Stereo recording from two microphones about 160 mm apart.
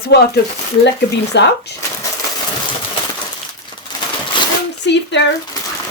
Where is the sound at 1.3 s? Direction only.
90° left.